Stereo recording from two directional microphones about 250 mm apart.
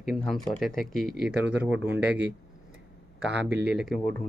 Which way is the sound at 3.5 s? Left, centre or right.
Right.